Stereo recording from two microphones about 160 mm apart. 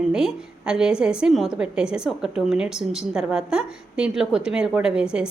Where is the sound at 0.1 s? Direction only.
5° right (ahead or behind).